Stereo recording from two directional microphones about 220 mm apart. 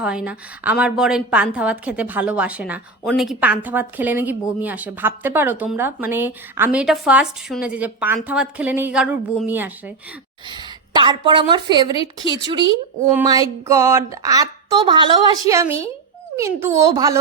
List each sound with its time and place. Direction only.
0.0 s a woman's voice: 5° right (ahead or behind)
10.5 s speech: 20° right (ahead or behind)
13.1 s speech: 15° right (ahead or behind)